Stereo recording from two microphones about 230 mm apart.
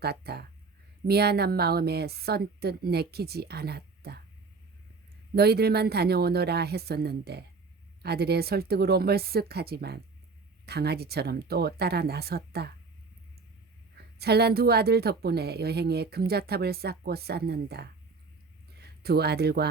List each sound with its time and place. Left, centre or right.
0.0 s a woman's voice: right
5.3 s a woman's voice: right
14.2 s a woman's voice: right